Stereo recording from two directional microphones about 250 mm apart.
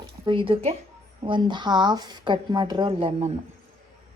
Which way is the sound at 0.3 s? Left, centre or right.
Centre.